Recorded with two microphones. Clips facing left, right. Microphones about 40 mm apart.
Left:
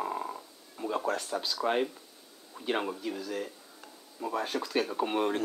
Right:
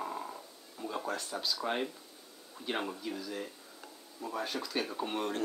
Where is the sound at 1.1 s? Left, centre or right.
Centre.